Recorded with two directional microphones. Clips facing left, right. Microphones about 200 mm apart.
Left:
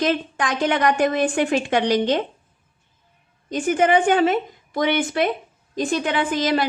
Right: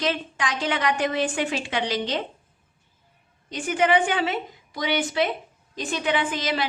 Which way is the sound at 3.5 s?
45° left (ahead or behind).